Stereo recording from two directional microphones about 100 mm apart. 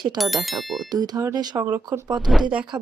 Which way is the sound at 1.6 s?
20° right (ahead or behind).